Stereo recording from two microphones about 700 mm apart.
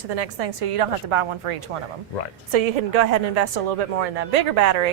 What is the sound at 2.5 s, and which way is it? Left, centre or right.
A woman's voice, right.